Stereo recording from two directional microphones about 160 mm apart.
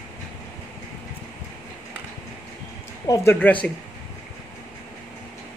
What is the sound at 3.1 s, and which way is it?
Speech, 15° left (ahead or behind).